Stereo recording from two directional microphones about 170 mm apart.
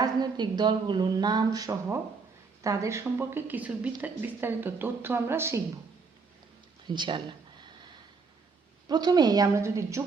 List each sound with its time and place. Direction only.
0.0 s a woman's voice: 25° right (ahead or behind)
6.8 s speech: 25° right (ahead or behind)
8.9 s speech: 25° right (ahead or behind)